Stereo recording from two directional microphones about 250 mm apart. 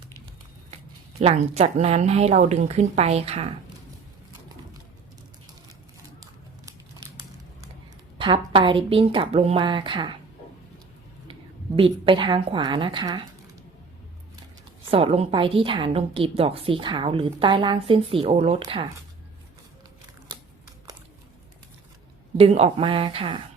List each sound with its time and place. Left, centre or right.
1.2 s a woman's voice: right
6.7 s crumpling: centre
8.2 s a woman's voice: centre
11.8 s a woman's voice: centre
14.8 s a woman's voice: right
22.4 s a woman's voice: right